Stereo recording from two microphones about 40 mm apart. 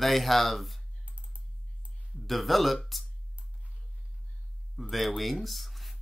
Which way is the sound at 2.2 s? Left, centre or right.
Centre.